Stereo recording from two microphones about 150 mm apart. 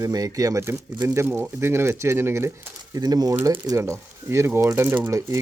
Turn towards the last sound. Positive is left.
turn(degrees=-20)  # may be behind; listen again after turning